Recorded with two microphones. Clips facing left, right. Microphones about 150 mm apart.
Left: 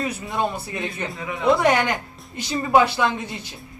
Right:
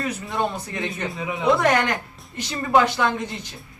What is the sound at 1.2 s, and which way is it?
Speech, 15° right (ahead or behind).